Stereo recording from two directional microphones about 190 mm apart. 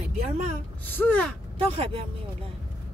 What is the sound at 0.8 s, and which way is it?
Speech, 10° left (ahead or behind).